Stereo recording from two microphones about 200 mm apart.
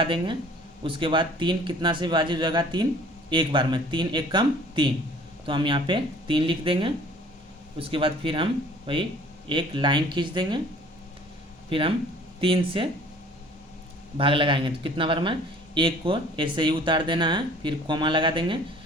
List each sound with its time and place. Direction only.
0.0 s a man's voice: 25° right (ahead or behind)
11.7 s a man's voice: 25° right (ahead or behind)
14.2 s a man's voice: 25° right (ahead or behind)